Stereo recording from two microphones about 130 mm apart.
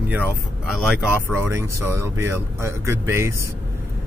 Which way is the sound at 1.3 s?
20° right (ahead or behind).